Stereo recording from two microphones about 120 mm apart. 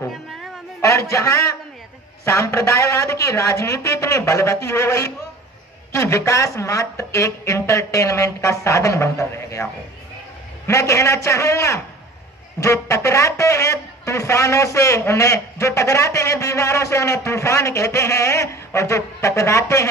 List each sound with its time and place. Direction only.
0.1 s music: centre (ahead or behind)
0.7 s a man's voice: 25° left (ahead or behind)
10.7 s a man's voice: 25° left (ahead or behind)